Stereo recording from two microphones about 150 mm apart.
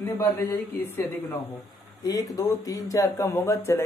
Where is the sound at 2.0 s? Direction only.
25° left (ahead or behind).